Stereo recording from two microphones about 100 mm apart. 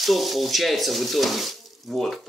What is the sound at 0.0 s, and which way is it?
Speech, centre (ahead or behind).